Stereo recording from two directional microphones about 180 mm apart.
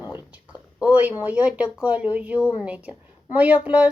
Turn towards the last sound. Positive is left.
turn(degrees=-5)  # may be behind; listen again after turning